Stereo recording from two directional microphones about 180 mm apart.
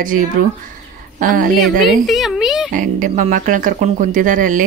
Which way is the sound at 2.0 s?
Centre (ahead or behind).